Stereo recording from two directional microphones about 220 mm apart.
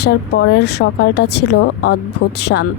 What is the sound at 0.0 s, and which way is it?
Speech, 50° left (ahead or behind).